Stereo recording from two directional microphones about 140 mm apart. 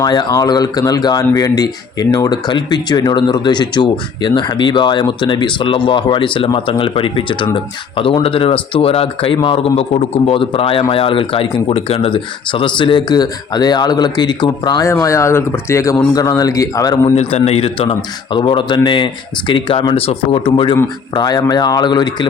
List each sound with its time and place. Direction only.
0.0 s speech: 30° left (ahead or behind)
17.2 s speech: 50° left (ahead or behind); by 22.3 s 30° left (ahead or behind)